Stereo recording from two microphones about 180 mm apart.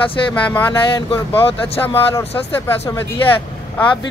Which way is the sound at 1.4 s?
30° left (ahead or behind).